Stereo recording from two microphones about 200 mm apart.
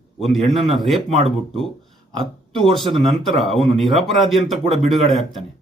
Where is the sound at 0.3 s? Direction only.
Centre (ahead or behind).